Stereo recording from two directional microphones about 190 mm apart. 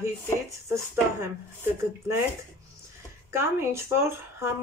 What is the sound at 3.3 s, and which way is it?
A woman's voice, 15° right (ahead or behind).